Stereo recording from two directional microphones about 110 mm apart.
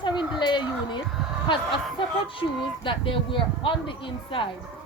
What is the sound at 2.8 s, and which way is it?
Speech, 50° left (ahead or behind).